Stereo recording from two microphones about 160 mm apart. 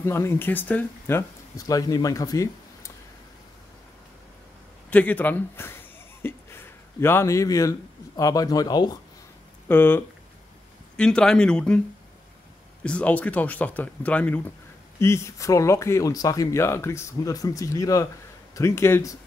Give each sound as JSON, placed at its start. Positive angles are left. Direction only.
{"t": 0.0, "sound": "speech", "side_deg": 15}
{"t": 1.7, "sound": "speech", "side_deg": 25}
{"t": 4.9, "sound": "speech", "side_deg": 10}
{"t": 6.2, "sound": "a sound", "side_deg": 15}
{"t": 8.2, "sound": "speech", "side_deg": 20}
{"t": 9.7, "sound": "speech", "side_deg": 15}
{"t": 12.8, "sound": "speech", "side_deg": 10}